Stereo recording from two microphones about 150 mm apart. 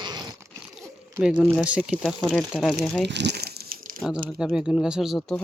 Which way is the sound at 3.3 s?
90° right.